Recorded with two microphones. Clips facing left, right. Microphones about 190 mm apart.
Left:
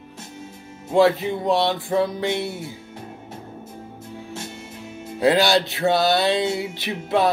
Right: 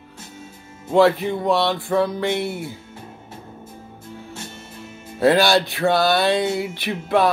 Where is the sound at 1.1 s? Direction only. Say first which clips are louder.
Right 1 dB; 20° left (ahead or behind).